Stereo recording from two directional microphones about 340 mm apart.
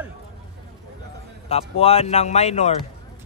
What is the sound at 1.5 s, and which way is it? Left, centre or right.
A man's voice, centre.